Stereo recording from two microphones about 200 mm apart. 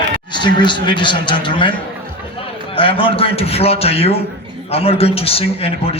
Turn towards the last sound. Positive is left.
turn(degrees=30)  # may be behind; listen again after turning